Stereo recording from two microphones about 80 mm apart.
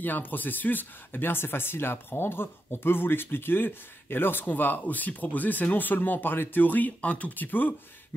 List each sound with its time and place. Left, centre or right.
0.0 s speech: left